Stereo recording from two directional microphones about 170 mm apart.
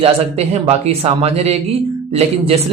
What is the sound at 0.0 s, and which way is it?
Speech, 40° right (ahead or behind).